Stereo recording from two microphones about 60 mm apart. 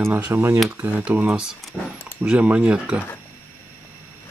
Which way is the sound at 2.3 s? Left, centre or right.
Centre.